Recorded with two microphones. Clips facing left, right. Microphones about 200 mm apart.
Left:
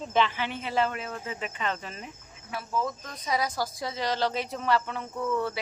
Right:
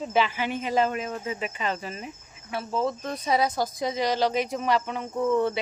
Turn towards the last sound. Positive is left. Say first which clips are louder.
# right 6 dB
turn(degrees=-25)  # may be behind; listen again after turning